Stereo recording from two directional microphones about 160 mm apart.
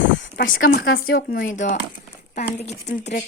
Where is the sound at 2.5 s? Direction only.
40° left (ahead or behind).